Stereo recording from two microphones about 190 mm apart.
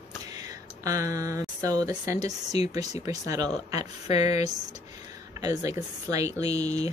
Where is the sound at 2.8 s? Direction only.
20° right (ahead or behind).